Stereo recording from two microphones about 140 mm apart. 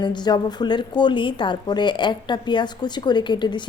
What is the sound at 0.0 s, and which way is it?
A woman's voice, 30° left (ahead or behind).